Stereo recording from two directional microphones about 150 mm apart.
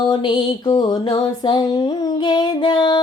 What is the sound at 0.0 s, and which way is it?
Music, 30° left (ahead or behind).